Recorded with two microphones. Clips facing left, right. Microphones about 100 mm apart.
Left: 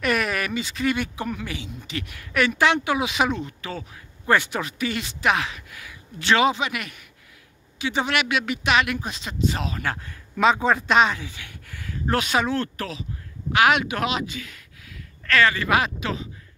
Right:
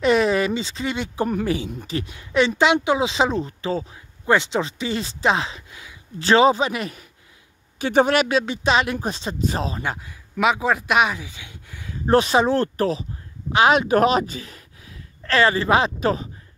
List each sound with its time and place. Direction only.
0.0 s speech: 25° right (ahead or behind)
1.2 s speech: 35° right (ahead or behind)
2.0 s speech: 25° right (ahead or behind)
6.2 s speech: 35° right (ahead or behind)
7.8 s speech: 45° right (ahead or behind)
9.8 s speech: 10° right (ahead or behind)
12.1 s speech: 30° right (ahead or behind)
16.0 s speech: 40° right (ahead or behind)